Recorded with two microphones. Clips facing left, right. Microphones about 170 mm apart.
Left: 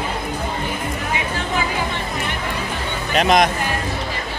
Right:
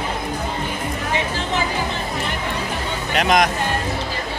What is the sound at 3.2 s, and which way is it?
Speech, 25° left (ahead or behind).